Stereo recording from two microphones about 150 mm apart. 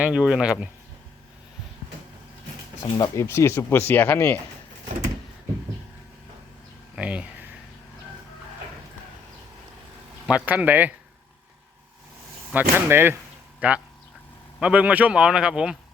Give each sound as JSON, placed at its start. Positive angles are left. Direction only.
{"t": 0.0, "sound": "speech", "side_deg": -5}
{"t": 2.8, "sound": "speech", "side_deg": 20}
{"t": 6.9, "sound": "a sound", "side_deg": -10}
{"t": 10.2, "sound": "speech", "side_deg": -10}
{"t": 12.5, "sound": "speech", "side_deg": -10}